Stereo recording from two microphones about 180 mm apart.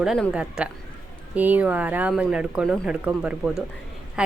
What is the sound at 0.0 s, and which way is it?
A woman's voice, 5° right (ahead or behind).